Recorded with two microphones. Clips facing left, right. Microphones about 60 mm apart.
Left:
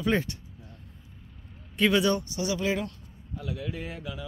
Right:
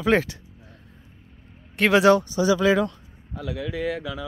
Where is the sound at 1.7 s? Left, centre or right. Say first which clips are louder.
Right 7 dB; right.